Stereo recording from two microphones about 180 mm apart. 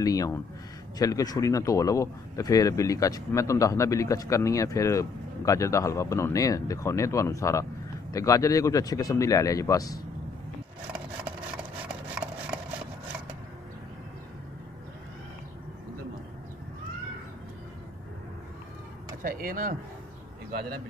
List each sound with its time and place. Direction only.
0.0 s speech: 20° left (ahead or behind)
19.2 s speech: 50° right (ahead or behind)